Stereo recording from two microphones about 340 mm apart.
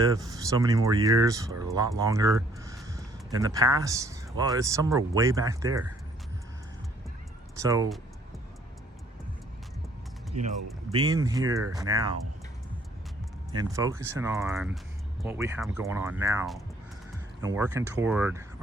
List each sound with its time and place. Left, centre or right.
0.0 s speech: centre
7.6 s speech: centre
10.3 s speech: right
10.9 s speech: centre
13.6 s speech: centre